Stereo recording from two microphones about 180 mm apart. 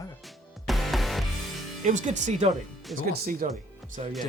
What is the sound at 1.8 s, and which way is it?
Speech, 40° right (ahead or behind).